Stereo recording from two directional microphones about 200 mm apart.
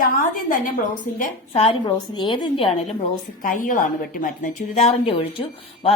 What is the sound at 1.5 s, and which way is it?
A woman's voice, 30° left (ahead or behind).